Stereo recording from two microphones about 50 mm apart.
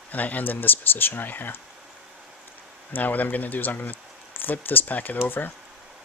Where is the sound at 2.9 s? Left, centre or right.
Left.